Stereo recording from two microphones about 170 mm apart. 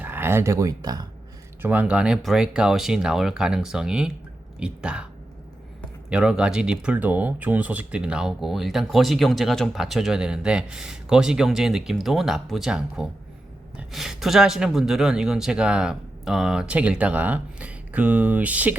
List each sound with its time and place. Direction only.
0.0 s speech: 15° right (ahead or behind)
1.6 s speech: 10° right (ahead or behind)
6.1 s speech: 5° right (ahead or behind)